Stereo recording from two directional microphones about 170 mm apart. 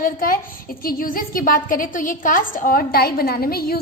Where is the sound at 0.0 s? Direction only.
55° left (ahead or behind).